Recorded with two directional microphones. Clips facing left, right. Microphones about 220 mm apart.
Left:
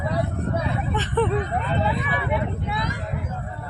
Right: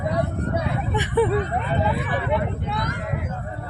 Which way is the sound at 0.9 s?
15° right (ahead or behind).